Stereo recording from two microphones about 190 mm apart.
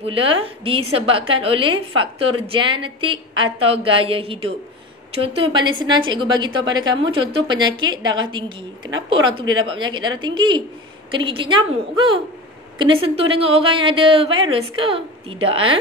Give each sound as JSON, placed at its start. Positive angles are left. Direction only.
{"t": 0.0, "sound": "a woman's voice", "side_deg": -30}